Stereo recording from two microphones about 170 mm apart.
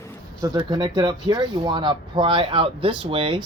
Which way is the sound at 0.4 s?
25° right (ahead or behind).